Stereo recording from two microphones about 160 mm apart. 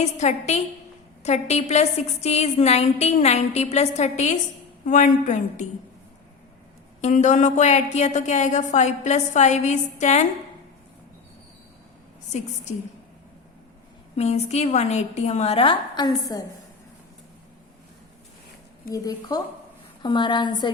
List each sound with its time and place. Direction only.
0.0 s a woman's voice: 45° left (ahead or behind)
7.0 s a woman's voice: 50° left (ahead or behind)
14.2 s a woman's voice: 45° left (ahead or behind); by 16.4 s 25° left (ahead or behind)
20.0 s a woman's voice: 30° left (ahead or behind)